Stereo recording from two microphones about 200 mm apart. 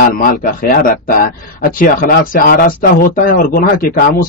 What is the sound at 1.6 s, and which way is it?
Speech, 50° left (ahead or behind).